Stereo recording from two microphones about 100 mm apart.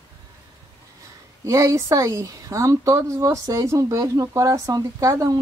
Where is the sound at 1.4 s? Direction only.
30° right (ahead or behind).